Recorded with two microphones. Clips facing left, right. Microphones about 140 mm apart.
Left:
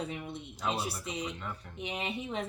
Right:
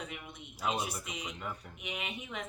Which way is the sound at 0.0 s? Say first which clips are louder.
Left 7 dB; 30° left (ahead or behind).